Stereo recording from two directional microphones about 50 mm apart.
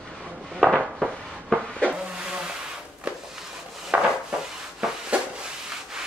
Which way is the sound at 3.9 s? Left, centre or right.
Centre.